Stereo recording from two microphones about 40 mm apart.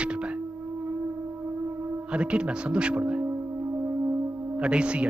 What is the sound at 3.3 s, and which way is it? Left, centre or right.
Music, right.